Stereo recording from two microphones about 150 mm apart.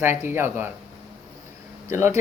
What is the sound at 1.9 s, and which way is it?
Speech, 15° right (ahead or behind).